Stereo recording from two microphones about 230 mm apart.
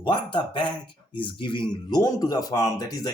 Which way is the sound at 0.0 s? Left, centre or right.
Left.